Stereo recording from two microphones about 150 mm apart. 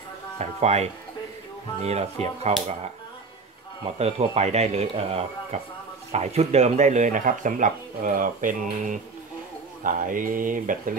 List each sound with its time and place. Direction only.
0.4 s speech: 45° right (ahead or behind)
3.8 s speech: 45° right (ahead or behind); by 11.0 s 65° right (ahead or behind)